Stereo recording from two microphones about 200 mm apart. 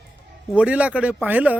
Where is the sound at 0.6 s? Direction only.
5° right (ahead or behind).